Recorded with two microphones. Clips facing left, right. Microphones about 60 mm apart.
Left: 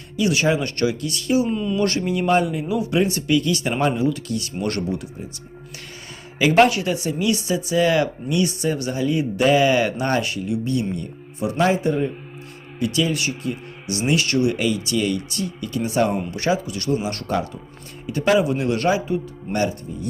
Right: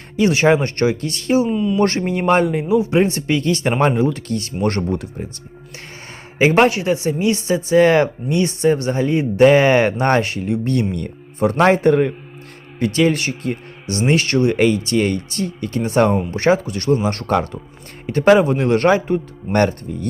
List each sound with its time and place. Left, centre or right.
0.2 s a woman's voice: right
1.5 s speech: centre
1.8 s a woman's voice: right
6.4 s a woman's voice: right
12.8 s a woman's voice: right